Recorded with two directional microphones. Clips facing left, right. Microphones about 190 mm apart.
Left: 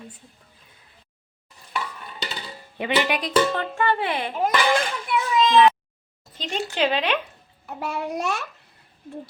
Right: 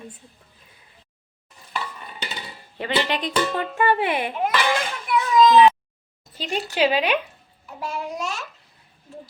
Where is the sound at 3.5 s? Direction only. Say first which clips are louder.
Right 2 dB; 15° right (ahead or behind).